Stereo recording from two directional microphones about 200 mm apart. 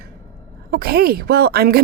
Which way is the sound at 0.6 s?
50° right (ahead or behind).